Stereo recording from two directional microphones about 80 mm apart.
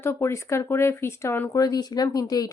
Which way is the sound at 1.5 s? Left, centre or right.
Left.